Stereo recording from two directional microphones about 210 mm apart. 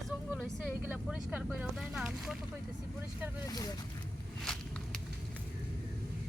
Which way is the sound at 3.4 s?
15° left (ahead or behind).